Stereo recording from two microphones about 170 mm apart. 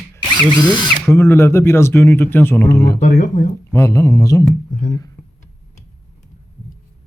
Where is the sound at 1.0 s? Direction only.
15° left (ahead or behind).